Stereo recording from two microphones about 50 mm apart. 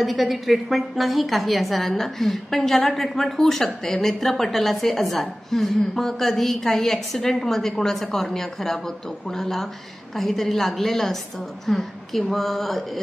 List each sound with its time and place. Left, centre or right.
0.0 s a woman's voice: centre